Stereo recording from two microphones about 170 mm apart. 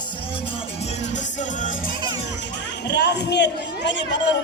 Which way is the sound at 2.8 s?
90° left.